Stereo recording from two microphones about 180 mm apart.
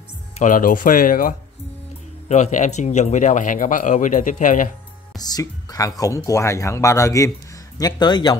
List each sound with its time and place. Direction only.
0.4 s a man's voice: 50° left (ahead or behind)
2.2 s a man's voice: 40° left (ahead or behind)
5.2 s speech: 20° left (ahead or behind)